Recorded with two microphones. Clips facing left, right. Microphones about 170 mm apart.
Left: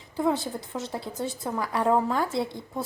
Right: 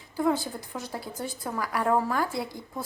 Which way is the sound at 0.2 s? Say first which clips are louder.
Even; 20° left (ahead or behind).